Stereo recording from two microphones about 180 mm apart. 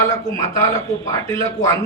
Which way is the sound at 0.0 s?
15° left (ahead or behind).